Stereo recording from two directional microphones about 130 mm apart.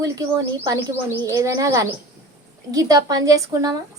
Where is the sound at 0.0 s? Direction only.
25° right (ahead or behind).